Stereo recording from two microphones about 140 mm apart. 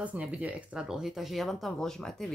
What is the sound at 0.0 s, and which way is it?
Speech, 10° right (ahead or behind).